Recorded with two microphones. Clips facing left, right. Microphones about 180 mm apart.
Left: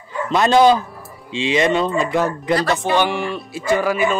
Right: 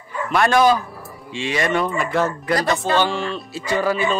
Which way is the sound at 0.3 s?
20° left (ahead or behind).